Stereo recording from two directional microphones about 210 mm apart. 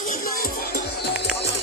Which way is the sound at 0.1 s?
40° left (ahead or behind).